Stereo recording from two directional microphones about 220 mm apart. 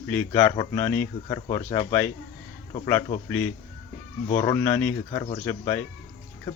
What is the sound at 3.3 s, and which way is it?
Speech, 5° left (ahead or behind).